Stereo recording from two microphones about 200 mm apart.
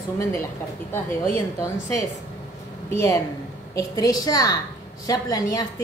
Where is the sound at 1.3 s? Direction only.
15° left (ahead or behind).